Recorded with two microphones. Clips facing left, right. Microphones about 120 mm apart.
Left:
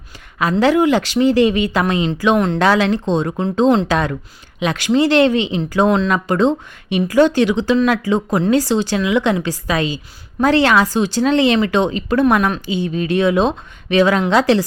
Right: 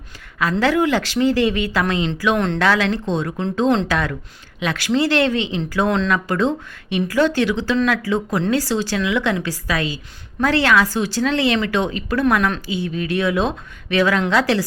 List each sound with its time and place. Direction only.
0.6 s a woman's voice: 15° left (ahead or behind)